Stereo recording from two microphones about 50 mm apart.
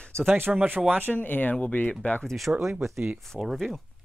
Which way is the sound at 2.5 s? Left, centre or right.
Right.